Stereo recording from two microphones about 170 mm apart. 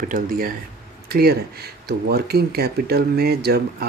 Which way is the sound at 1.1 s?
70° right (ahead or behind).